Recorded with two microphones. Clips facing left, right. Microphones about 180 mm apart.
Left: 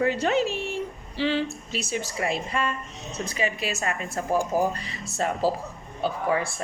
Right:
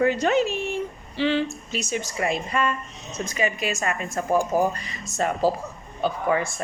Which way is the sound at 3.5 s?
30° left (ahead or behind).